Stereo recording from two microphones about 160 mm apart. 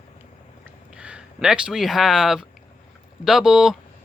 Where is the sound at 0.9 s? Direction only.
5° right (ahead or behind).